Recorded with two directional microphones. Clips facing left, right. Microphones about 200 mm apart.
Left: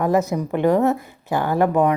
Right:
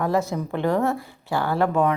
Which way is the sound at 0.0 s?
20° left (ahead or behind).